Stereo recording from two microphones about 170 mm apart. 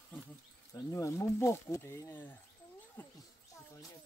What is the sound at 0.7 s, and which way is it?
Speech, 20° left (ahead or behind).